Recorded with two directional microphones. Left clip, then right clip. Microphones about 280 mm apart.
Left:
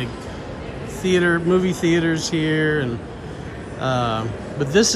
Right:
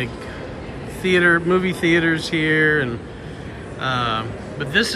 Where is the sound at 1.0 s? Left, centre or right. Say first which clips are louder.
Right 3 dB; centre.